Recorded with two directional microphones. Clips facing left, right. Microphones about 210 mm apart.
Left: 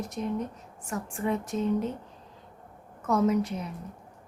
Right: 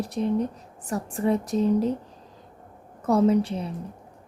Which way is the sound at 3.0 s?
35° right (ahead or behind).